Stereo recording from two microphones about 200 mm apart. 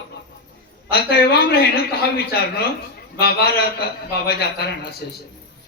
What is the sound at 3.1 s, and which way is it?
Speech, 55° left (ahead or behind).